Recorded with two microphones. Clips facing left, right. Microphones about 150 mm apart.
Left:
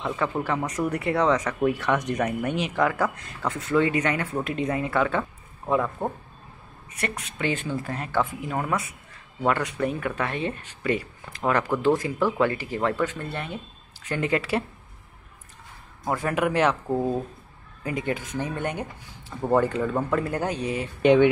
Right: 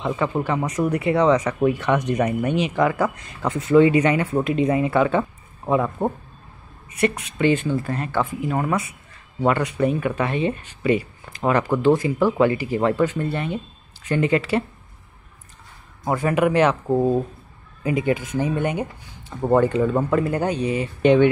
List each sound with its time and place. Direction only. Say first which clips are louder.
0.0 s speech: right 4 dB; 5° right (ahead or behind)
0.6 s speech: right 4 dB; 15° right (ahead or behind)
0.9 s speech: right 5 dB; 5° right (ahead or behind)
7.3 s speech: right 6 dB; centre (ahead or behind)
16.1 s speech: right 5 dB; 5° right (ahead or behind)
16.9 s speech: right 6 dB; 15° right (ahead or behind)
17.8 s speech: right 7 dB; 5° right (ahead or behind)